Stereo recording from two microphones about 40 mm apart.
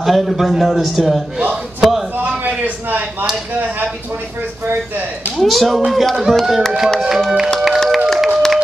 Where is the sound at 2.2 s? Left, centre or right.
Right.